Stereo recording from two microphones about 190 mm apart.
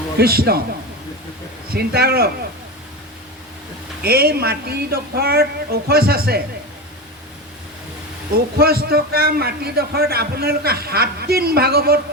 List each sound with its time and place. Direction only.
0.2 s a man's voice: 55° right (ahead or behind)
1.7 s a man's voice: 55° right (ahead or behind)
4.0 s a man's voice: 55° right (ahead or behind)
8.5 s a man's voice: 55° right (ahead or behind)